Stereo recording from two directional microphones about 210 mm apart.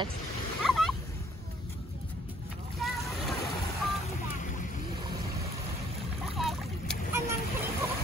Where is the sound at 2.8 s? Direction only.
Centre (ahead or behind).